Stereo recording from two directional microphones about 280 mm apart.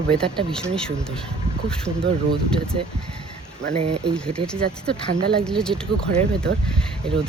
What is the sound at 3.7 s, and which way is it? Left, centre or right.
Speech, right.